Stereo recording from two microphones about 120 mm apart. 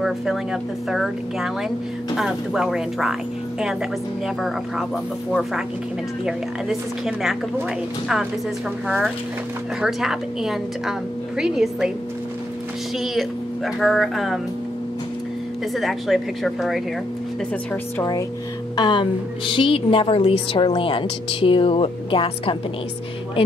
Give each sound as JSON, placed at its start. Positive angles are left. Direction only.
{"t": 0.0, "sound": "a woman's voice", "side_deg": -5}
{"t": 5.3, "sound": "a woman's voice", "side_deg": 0}
{"t": 8.8, "sound": "a woman's voice", "side_deg": -10}
{"t": 13.0, "sound": "a woman's voice", "side_deg": 0}
{"t": 15.7, "sound": "a woman's voice", "side_deg": 0}
{"t": 18.8, "sound": "a woman's voice", "side_deg": 40}